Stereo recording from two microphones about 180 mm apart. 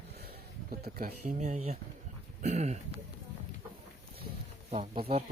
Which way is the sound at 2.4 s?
40° right (ahead or behind).